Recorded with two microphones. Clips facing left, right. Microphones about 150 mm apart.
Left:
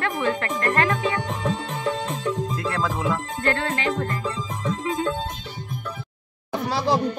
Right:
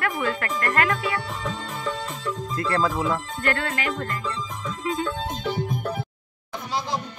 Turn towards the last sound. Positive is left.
turn(degrees=70)  # may be behind; listen again after turning